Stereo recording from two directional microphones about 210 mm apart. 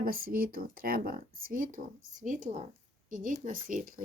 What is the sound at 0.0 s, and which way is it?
Speech, 45° right (ahead or behind).